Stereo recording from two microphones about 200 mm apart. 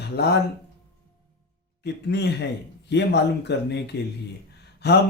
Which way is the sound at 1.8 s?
55° left (ahead or behind).